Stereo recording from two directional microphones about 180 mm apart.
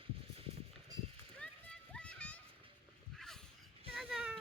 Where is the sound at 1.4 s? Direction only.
5° left (ahead or behind).